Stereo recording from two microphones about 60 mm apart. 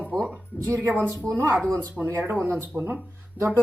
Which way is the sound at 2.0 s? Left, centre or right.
Right.